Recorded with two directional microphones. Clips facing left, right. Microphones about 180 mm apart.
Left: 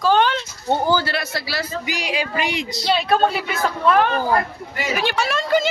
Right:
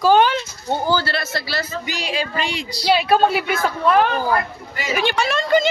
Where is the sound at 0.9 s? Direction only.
15° left (ahead or behind).